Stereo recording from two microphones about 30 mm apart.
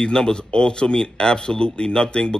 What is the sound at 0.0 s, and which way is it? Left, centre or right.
Speech, left.